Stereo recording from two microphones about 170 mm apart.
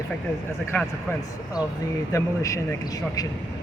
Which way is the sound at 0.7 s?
10° left (ahead or behind).